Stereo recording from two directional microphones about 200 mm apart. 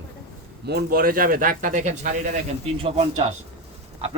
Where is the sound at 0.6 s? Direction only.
55° right (ahead or behind).